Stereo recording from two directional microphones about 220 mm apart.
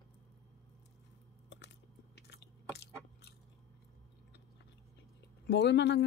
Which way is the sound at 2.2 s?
50° left (ahead or behind).